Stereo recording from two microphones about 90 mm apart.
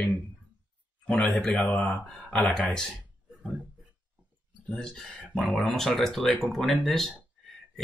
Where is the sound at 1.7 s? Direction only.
15° left (ahead or behind).